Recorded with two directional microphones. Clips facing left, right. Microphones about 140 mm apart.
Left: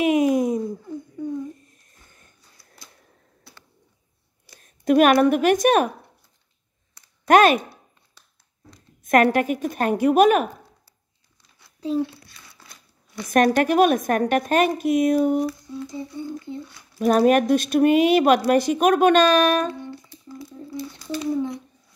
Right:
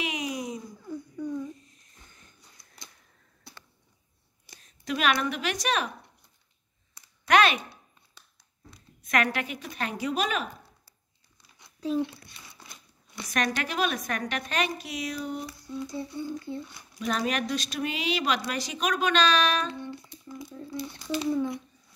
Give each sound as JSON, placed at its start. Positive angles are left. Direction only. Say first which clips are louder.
{"t": 0.0, "sound": "a sound", "louder": "left 14 dB", "side_deg": 50}
{"t": 2.6, "sound": "a sound", "louder": "left 4 dB", "side_deg": -20}
{"t": 4.6, "sound": "speech", "louder": "left 15 dB", "side_deg": 50}
{"t": 7.2, "sound": "speech", "louder": "left 7 dB", "side_deg": 45}
{"t": 9.0, "sound": "speech", "louder": "left 10 dB", "side_deg": 50}
{"t": 12.0, "sound": "crumpling", "louder": "left 4 dB", "side_deg": -20}
{"t": 13.3, "sound": "speech", "louder": "left 12 dB", "side_deg": 50}
{"t": 15.6, "sound": "speech", "louder": "left 2 dB", "side_deg": 20}
{"t": 17.0, "sound": "speech", "louder": "left 12 dB", "side_deg": 50}
{"t": 20.1, "sound": "speech", "louder": "left 2 dB", "side_deg": -15}